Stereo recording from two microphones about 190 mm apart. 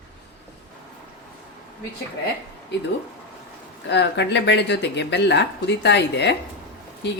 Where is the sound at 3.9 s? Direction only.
65° left (ahead or behind).